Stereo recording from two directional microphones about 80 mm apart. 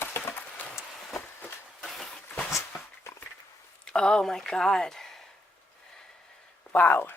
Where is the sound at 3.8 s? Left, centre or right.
Centre.